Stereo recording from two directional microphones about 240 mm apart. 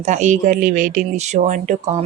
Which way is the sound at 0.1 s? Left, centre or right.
Right.